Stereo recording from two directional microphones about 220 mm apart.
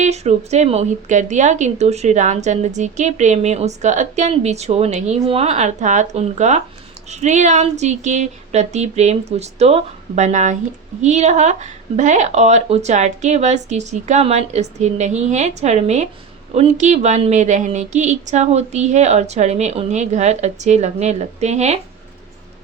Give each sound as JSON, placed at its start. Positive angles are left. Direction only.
{"t": 0.0, "sound": "a woman's voice", "side_deg": -30}